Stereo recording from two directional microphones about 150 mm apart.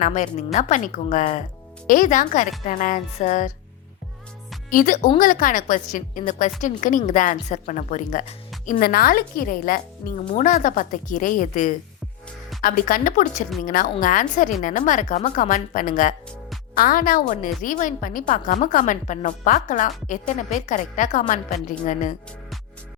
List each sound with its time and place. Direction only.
0.0 s a woman's voice: 55° left (ahead or behind)
4.7 s a woman's voice: 65° left (ahead or behind)
8.8 s a woman's voice: 80° left
10.0 s speech: 40° left (ahead or behind)
10.3 s a woman's voice: 60° left (ahead or behind)